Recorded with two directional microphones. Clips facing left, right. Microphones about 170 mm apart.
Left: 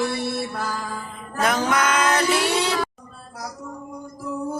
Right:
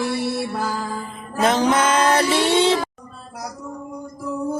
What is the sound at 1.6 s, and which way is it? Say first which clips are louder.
Mantra: right 4 dB; 25° right (ahead or behind).